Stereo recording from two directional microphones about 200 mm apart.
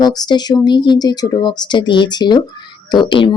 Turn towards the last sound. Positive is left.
turn(degrees=25)  # may be behind; listen again after turning